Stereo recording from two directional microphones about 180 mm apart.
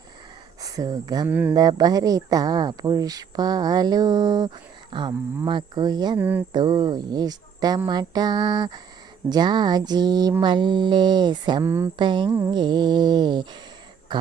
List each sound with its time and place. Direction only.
0.6 s speech: 20° right (ahead or behind)
1.3 s speech: 10° right (ahead or behind)
1.5 s speech: 20° right (ahead or behind)
6.1 s speech: 10° right (ahead or behind)
6.5 s speech: 25° right (ahead or behind)
11.6 s speech: 15° right (ahead or behind)
11.9 s speech: 25° right (ahead or behind)